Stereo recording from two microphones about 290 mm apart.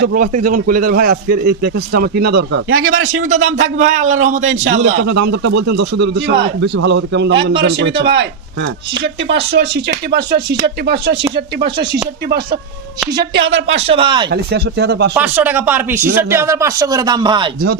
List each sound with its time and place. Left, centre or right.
0.0 s a man's voice: right
3.2 s a man's voice: right
4.0 s a man's voice: right
5.9 s a man's voice: right
13.3 s a man's voice: right
13.8 s speech: centre
14.3 s a man's voice: right
15.1 s speech: centre